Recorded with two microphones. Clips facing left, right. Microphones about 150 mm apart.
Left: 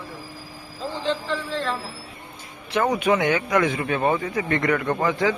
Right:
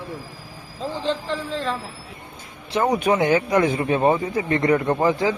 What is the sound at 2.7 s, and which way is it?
Speech, 30° right (ahead or behind).